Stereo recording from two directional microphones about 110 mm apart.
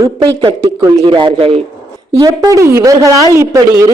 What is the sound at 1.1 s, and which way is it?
Speech, 45° right (ahead or behind).